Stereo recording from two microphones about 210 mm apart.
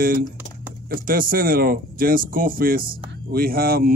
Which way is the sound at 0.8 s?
40° right (ahead or behind).